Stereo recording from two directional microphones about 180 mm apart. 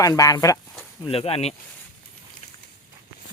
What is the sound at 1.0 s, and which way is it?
Speech, 30° left (ahead or behind).